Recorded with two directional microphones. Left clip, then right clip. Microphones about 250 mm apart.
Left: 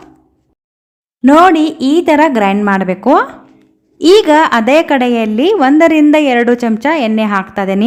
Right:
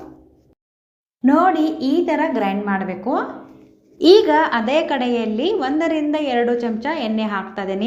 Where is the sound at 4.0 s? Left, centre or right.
Left.